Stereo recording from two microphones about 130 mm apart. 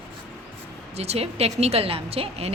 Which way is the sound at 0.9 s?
55° right (ahead or behind).